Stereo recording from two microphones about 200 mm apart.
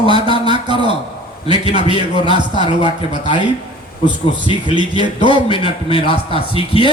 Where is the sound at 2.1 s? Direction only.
25° right (ahead or behind).